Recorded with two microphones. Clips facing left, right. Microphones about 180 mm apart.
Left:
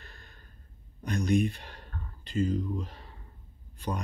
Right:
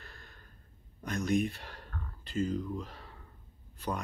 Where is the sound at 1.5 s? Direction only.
20° left (ahead or behind).